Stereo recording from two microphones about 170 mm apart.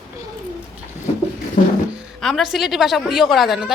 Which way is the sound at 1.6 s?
55° left (ahead or behind).